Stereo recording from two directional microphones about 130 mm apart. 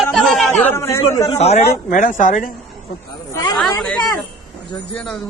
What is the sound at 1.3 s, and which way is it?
Speech, 55° left (ahead or behind).